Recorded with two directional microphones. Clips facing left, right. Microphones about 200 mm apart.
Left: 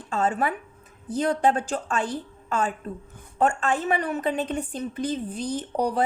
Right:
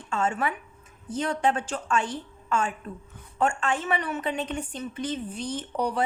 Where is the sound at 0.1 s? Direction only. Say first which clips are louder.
Left 3 dB; 35° left (ahead or behind).